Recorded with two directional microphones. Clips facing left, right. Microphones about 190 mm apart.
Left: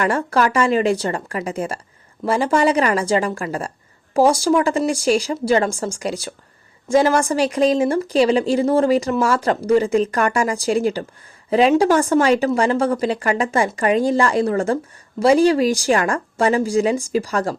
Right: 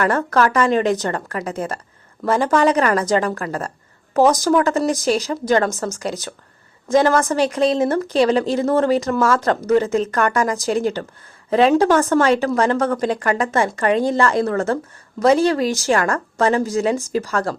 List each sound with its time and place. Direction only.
0.0 s speech: 10° left (ahead or behind)